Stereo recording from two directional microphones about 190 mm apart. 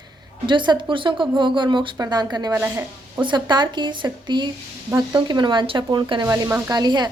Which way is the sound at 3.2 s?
25° right (ahead or behind).